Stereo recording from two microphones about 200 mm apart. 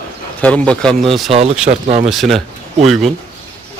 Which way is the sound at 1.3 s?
30° right (ahead or behind).